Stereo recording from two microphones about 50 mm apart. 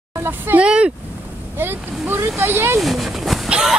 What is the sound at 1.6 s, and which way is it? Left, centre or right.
Speech, right.